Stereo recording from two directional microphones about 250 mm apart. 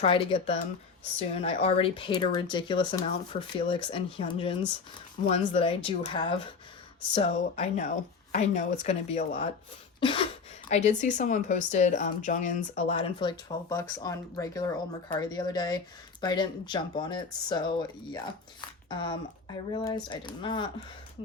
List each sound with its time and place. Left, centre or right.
0.0 s speech: left
10.0 s a sound: left
10.7 s speech: left